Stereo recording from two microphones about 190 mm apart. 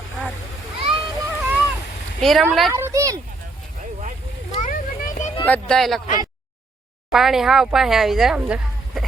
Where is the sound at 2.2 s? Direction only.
Centre (ahead or behind).